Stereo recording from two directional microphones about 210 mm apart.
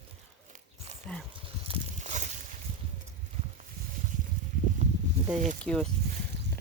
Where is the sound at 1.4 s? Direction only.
25° right (ahead or behind).